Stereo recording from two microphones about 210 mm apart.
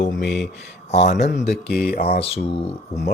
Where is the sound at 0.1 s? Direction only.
60° left (ahead or behind).